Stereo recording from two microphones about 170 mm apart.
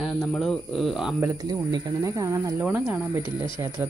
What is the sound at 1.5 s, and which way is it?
Speech, 20° right (ahead or behind).